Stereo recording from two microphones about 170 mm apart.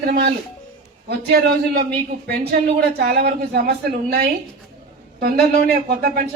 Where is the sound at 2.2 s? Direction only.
70° right (ahead or behind).